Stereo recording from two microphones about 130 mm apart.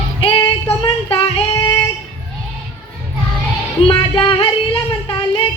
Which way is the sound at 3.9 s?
45° left (ahead or behind).